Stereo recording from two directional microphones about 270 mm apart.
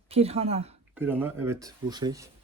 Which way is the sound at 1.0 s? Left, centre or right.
Centre.